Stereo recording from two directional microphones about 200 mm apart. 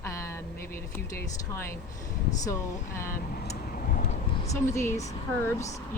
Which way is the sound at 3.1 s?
45° left (ahead or behind).